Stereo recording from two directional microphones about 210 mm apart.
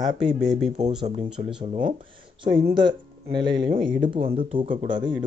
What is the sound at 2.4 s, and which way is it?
Speech, 25° right (ahead or behind).